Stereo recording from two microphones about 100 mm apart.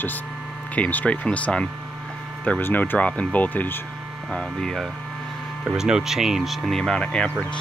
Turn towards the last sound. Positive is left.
turn(degrees=10)  # may be behind; listen again after turning